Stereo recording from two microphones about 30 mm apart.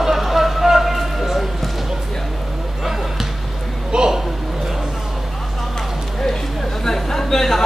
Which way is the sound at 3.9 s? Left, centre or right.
Right.